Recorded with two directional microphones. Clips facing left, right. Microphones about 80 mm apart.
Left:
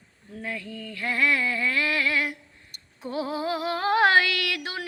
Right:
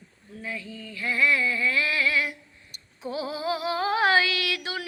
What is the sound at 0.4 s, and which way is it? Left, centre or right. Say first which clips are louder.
Singing: left 2 dB; left.